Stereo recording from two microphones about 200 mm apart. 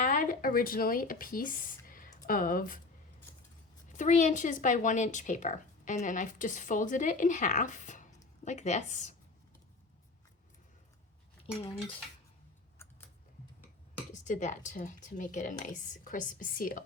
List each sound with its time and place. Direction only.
0.0 s speech: 40° left (ahead or behind)
3.9 s a woman's voice: 35° left (ahead or behind)
14.1 s a woman's voice: 40° left (ahead or behind)